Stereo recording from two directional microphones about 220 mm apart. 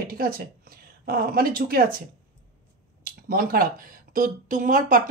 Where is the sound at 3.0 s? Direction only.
40° right (ahead or behind).